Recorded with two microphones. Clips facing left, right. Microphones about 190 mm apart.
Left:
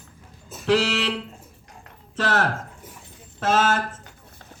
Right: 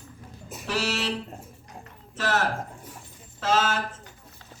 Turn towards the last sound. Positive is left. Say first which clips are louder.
# left 3 dB
turn(degrees=50)  # may be behind; listen again after turning